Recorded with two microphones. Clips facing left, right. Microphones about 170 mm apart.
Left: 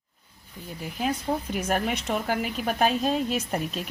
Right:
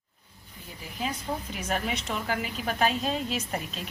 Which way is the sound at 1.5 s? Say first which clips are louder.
Left 4 dB; 50° left (ahead or behind).